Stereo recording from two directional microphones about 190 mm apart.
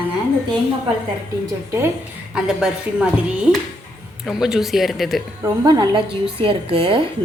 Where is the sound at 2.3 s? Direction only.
5° right (ahead or behind).